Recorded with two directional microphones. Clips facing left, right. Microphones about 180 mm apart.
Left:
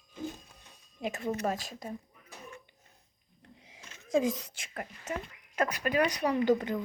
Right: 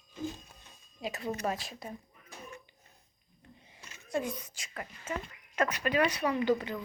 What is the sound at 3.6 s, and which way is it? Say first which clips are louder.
Speech: left 1 dB; 90° left.